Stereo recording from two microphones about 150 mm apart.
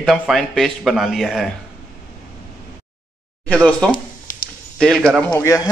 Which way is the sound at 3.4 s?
10° left (ahead or behind).